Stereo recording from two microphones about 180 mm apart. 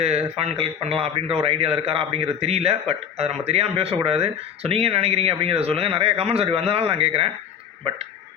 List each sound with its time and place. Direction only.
0.0 s a man's voice: 35° right (ahead or behind)